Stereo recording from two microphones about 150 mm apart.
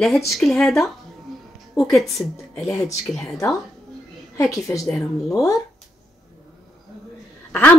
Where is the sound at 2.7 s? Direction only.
20° left (ahead or behind).